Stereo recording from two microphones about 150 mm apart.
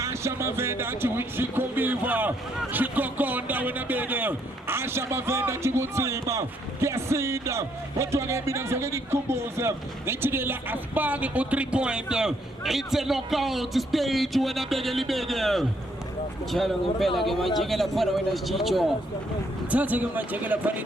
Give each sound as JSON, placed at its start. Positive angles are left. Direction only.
{"t": 0.0, "sound": "a man's voice", "side_deg": -20}
{"t": 19.7, "sound": "speech", "side_deg": -10}